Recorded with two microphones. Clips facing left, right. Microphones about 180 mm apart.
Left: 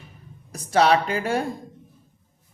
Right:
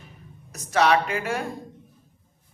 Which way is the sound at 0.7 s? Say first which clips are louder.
Left 2 dB; 35° left (ahead or behind).